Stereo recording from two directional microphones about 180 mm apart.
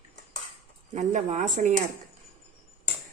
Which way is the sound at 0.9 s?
40° right (ahead or behind).